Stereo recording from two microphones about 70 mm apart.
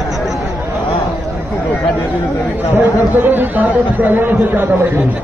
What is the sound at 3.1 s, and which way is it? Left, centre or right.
A man's voice, right.